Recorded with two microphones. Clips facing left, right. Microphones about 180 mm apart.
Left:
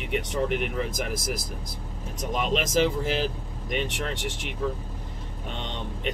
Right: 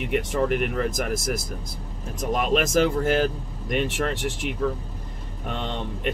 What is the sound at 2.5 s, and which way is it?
Speech, 55° right (ahead or behind).